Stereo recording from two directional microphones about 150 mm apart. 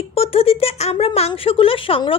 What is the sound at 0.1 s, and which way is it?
Speech, 40° left (ahead or behind).